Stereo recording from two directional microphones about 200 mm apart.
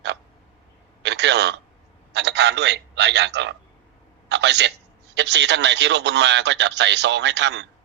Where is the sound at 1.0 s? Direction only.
60° right (ahead or behind).